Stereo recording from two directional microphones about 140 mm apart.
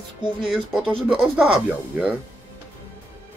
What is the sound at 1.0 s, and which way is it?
Speech, 10° right (ahead or behind).